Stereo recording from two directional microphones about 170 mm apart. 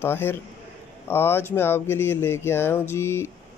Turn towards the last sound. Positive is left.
turn(degrees=15)  # may be behind; listen again after turning